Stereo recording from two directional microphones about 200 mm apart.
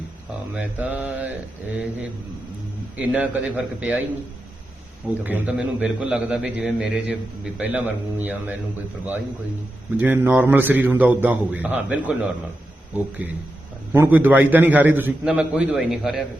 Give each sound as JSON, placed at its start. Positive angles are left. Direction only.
{"t": 0.5, "sound": "a man's voice", "side_deg": -5}
{"t": 3.0, "sound": "a man's voice", "side_deg": -5}
{"t": 5.2, "sound": "a man's voice", "side_deg": -5}
{"t": 10.0, "sound": "a man's voice", "side_deg": -10}
{"t": 13.9, "sound": "a man's voice", "side_deg": -10}